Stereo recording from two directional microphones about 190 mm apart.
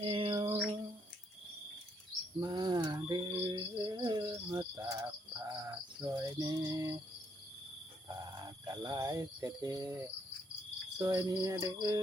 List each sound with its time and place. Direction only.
0.0 s mantra: 25° right (ahead or behind)
2.4 s cricket: 20° right (ahead or behind)
8.0 s cricket: 20° right (ahead or behind)